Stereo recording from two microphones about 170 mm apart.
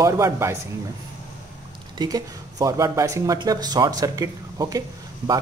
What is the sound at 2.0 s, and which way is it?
Speech, 20° right (ahead or behind).